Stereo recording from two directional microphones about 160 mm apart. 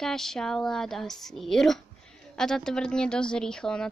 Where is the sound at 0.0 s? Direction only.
Centre (ahead or behind).